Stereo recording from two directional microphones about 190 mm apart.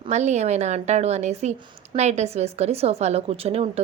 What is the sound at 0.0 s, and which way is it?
A woman's voice, 35° right (ahead or behind).